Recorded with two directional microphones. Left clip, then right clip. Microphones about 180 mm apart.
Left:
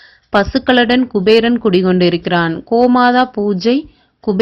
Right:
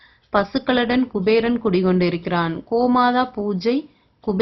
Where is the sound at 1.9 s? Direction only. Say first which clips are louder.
Left 7 dB; 30° left (ahead or behind).